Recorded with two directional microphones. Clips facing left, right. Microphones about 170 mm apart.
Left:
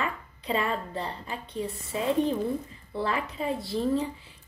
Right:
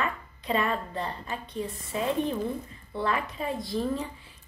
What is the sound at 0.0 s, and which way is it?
A woman's voice, 25° left (ahead or behind).